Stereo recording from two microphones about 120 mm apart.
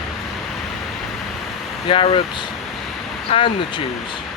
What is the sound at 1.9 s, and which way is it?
Speech, 45° left (ahead or behind).